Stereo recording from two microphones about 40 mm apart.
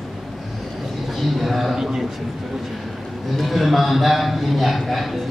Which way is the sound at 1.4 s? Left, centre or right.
Centre.